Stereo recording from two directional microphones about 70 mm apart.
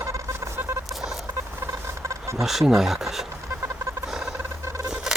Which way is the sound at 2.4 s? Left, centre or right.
Centre.